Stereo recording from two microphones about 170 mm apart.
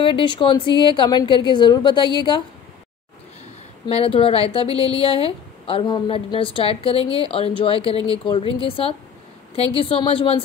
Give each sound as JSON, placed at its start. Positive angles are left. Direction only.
{"t": 0.0, "sound": "a woman's voice", "side_deg": 30}
{"t": 3.8, "sound": "a woman's voice", "side_deg": 35}